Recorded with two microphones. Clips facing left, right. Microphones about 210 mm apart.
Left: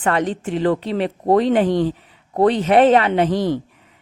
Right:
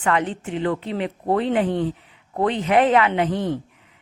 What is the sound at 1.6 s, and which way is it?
Speech, 90° left.